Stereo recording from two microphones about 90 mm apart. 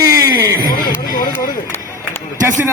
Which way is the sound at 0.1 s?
35° right (ahead or behind).